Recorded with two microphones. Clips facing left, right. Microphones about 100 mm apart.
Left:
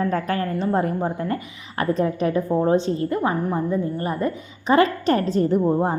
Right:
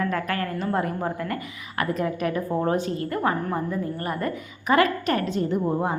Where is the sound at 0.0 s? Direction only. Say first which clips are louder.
Left 3 dB; 30° left (ahead or behind).